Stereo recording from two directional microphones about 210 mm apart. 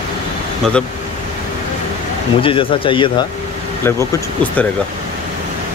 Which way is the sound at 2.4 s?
25° left (ahead or behind).